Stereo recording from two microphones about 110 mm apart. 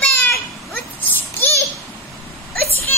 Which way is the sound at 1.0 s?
20° left (ahead or behind).